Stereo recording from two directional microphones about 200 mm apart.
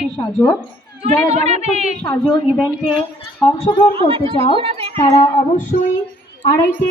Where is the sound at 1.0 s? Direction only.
35° right (ahead or behind).